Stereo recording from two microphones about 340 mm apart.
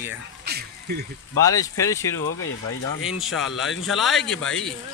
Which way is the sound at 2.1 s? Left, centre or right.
Left.